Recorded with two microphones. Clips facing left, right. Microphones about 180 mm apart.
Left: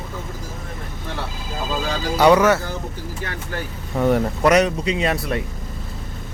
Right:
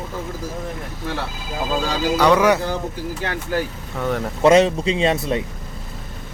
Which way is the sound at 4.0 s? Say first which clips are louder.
Left 5 dB; 15° left (ahead or behind).